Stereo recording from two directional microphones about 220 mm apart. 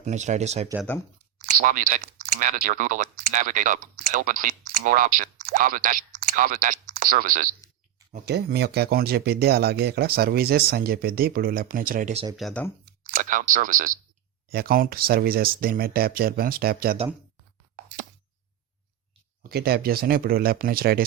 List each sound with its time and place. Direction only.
0.0 s speech: 30° right (ahead or behind)
12.4 s speech: centre (ahead or behind)
13.1 s speech: 40° right (ahead or behind)
19.4 s speech: 45° right (ahead or behind)